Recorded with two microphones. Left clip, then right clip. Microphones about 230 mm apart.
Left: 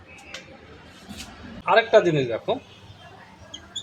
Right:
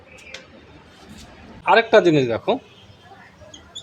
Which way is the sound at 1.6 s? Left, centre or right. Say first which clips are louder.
Right 3 dB; right.